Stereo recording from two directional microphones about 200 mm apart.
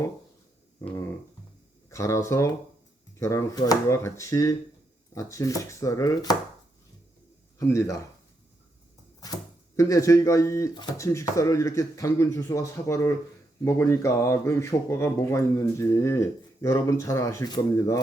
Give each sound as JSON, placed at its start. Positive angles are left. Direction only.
{"t": 0.8, "sound": "speech", "side_deg": 15}
{"t": 7.7, "sound": "speech", "side_deg": 15}
{"t": 9.2, "sound": "speech", "side_deg": 20}